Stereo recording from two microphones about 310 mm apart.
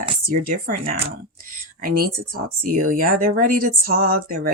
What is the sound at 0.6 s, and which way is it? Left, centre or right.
Speech, right.